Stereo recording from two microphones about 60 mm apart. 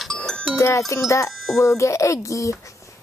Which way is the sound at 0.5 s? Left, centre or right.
Left.